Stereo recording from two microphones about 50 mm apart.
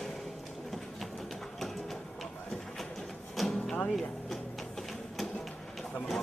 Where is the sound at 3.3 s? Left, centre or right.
Centre.